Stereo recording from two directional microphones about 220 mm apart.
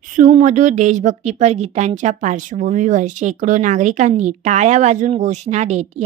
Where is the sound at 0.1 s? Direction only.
30° right (ahead or behind).